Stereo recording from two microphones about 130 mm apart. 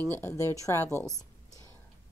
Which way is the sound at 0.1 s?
20° left (ahead or behind).